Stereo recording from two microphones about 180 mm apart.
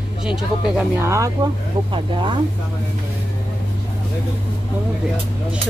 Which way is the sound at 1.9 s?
25° right (ahead or behind).